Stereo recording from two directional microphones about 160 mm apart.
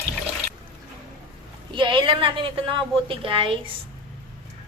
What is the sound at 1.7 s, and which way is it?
A woman's voice, 30° right (ahead or behind).